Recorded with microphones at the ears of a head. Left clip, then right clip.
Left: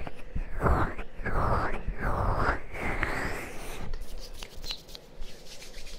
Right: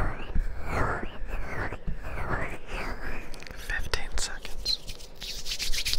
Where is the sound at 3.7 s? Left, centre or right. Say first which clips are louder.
Right 12 dB; right.